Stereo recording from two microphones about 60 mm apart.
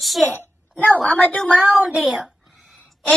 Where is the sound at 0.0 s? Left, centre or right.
Centre.